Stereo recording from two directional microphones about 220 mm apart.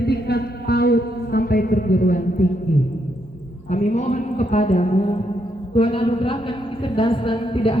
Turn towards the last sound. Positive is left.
turn(degrees=25)  # may be behind; listen again after turning